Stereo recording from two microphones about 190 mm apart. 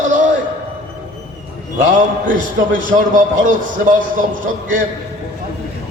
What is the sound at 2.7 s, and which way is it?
Music, 45° right (ahead or behind).